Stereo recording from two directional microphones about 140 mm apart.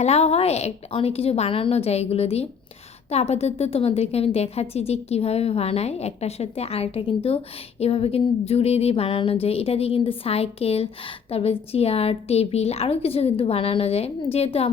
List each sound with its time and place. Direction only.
0.0 s a woman's voice: 50° left (ahead or behind)